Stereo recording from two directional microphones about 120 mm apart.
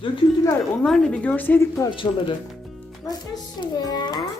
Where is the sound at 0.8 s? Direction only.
5° left (ahead or behind).